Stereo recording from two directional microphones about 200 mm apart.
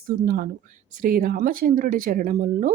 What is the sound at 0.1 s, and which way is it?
Speech, 50° right (ahead or behind).